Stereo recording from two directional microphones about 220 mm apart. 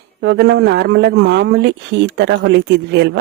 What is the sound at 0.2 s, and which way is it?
A man's voice, 50° right (ahead or behind).